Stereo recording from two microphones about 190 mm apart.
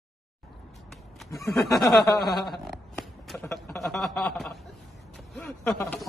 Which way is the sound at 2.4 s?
Centre (ahead or behind).